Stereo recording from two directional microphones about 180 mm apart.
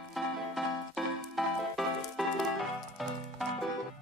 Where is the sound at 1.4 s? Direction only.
Centre (ahead or behind).